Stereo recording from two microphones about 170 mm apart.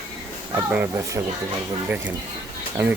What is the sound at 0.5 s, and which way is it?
Speech, 15° right (ahead or behind).